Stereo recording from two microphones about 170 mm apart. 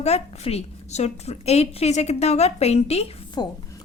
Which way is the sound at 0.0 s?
35° left (ahead or behind).